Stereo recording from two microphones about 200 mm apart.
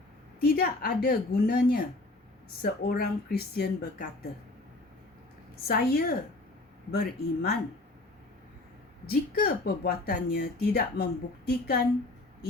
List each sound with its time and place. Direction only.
0.4 s speech: 45° left (ahead or behind)
5.6 s speech: 50° left (ahead or behind)
9.0 s speech: 50° left (ahead or behind)